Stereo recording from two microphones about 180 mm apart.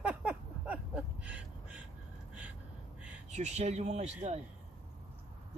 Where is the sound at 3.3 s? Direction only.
40° right (ahead or behind).